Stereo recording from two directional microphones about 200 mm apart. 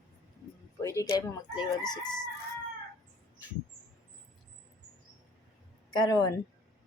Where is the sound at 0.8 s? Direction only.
15° left (ahead or behind).